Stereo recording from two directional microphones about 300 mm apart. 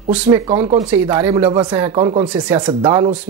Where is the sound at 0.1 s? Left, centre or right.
Centre.